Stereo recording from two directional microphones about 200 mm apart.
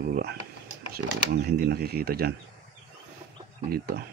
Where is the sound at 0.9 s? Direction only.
50° right (ahead or behind).